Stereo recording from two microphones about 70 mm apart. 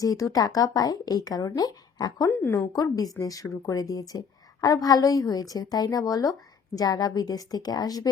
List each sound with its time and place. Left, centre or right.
0.0 s speech: left
2.3 s speech: left
2.7 s a woman's voice: left